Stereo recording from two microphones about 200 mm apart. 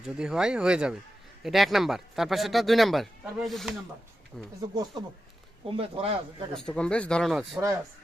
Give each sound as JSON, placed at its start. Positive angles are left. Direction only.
{"t": 0.0, "sound": "speech", "side_deg": -5}
{"t": 4.4, "sound": "speech", "side_deg": -20}
{"t": 5.7, "sound": "speech", "side_deg": -30}
{"t": 6.5, "sound": "speech", "side_deg": 5}